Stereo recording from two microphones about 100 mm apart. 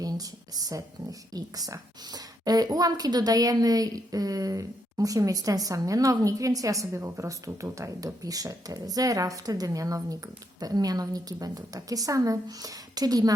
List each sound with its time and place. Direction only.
0.0 s a woman's voice: 40° right (ahead or behind)